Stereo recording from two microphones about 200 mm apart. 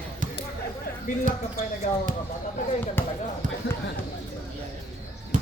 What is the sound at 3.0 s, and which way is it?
Speech, 10° left (ahead or behind).